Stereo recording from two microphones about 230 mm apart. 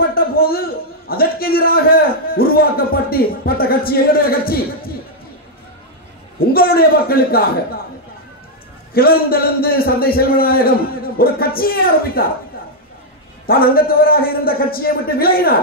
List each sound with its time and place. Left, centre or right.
0.1 s a man's voice: left
6.4 s a man's voice: left
8.9 s a man's voice: left
13.5 s a man's voice: left